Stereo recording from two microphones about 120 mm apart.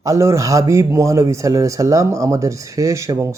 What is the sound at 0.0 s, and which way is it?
Speech, 25° right (ahead or behind).